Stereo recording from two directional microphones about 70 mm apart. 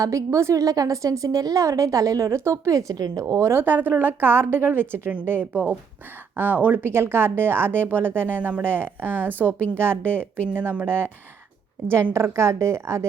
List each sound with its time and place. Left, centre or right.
0.0 s a woman's voice: right
3.5 s speech: right
9.5 s speech: left
9.7 s speech: right
10.1 s speech: left
10.5 s speech: right
12.1 s speech: right